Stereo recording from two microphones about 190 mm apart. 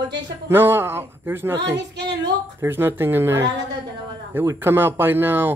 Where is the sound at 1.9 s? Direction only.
65° right (ahead or behind).